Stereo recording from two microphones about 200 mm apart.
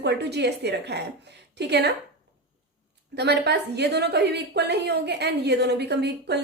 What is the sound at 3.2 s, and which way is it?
Speech, 55° right (ahead or behind).